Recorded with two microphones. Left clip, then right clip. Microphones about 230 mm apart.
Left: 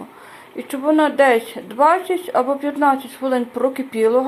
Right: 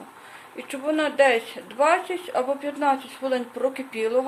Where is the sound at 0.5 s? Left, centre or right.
Centre.